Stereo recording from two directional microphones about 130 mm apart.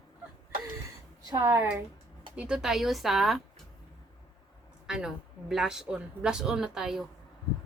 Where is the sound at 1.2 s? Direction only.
25° right (ahead or behind).